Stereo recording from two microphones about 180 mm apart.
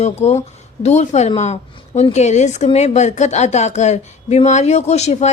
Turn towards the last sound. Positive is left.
turn(degrees=40)  # may be behind; listen again after turning